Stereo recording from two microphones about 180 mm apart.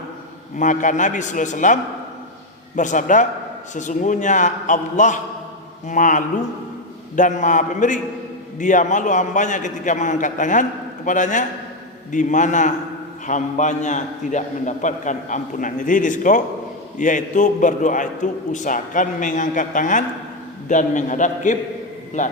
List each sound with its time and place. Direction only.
0.5 s a man's voice: 45° left (ahead or behind)